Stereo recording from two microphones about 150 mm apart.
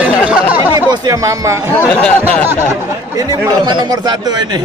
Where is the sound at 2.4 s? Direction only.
15° right (ahead or behind).